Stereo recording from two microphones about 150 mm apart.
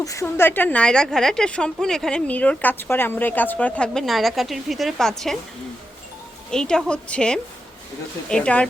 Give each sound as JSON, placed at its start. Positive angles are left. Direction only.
{"t": 0.0, "sound": "speech", "side_deg": 20}
{"t": 6.5, "sound": "a woman's voice", "side_deg": 5}